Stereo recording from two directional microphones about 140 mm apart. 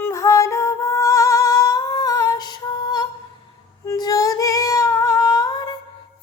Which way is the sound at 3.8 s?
25° left (ahead or behind).